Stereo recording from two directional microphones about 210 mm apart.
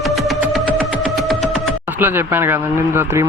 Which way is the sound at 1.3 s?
Centre (ahead or behind).